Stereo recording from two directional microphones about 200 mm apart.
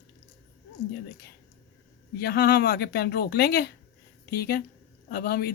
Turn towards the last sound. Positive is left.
turn(degrees=50)  # may be behind; listen again after turning